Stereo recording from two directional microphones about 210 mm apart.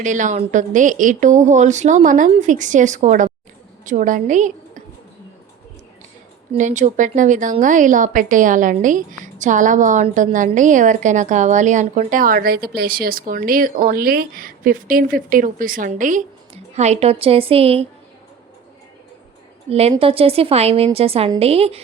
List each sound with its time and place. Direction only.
0.0 s a woman's voice: 35° right (ahead or behind)
6.5 s a woman's voice: 35° right (ahead or behind)
19.9 s a woman's voice: 25° right (ahead or behind)